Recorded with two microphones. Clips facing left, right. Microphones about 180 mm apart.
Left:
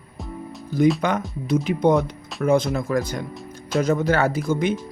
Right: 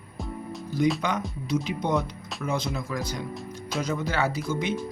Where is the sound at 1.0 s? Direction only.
50° left (ahead or behind).